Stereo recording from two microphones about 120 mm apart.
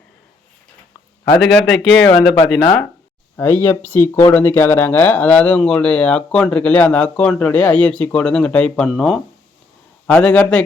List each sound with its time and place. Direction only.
1.4 s speech: 5° left (ahead or behind)
3.3 s speech: 15° left (ahead or behind); by 9.2 s centre (ahead or behind)
10.1 s speech: 10° left (ahead or behind)